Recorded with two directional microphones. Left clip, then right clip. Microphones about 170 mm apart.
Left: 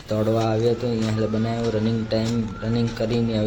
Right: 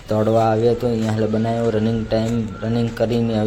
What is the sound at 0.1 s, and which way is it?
Speech, 20° right (ahead or behind).